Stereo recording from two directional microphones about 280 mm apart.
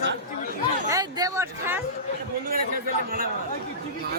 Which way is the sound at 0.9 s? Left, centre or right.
Centre.